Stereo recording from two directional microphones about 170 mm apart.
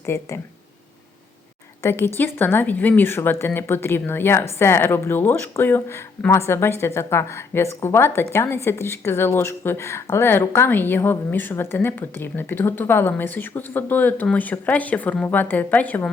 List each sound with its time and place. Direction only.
0.0 s a woman's voice: 15° left (ahead or behind)
1.8 s a woman's voice: 15° left (ahead or behind)